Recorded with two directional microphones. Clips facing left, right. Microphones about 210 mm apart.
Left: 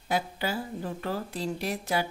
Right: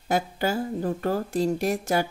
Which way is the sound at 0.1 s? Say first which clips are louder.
Right 5 dB; 45° right (ahead or behind).